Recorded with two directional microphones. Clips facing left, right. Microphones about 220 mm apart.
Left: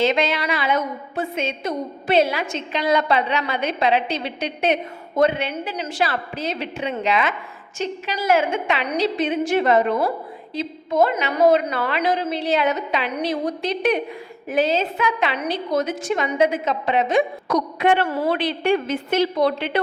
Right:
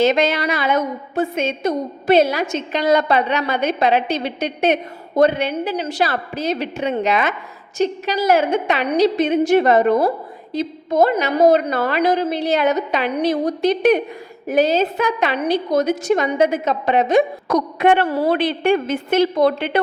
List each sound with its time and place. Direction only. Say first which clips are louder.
0.0 s a woman's voice: right 4 dB; 45° right (ahead or behind)
18.0 s a woman's voice: right 3 dB; 35° right (ahead or behind)
18.3 s a woman's voice: right 3 dB; 50° right (ahead or behind)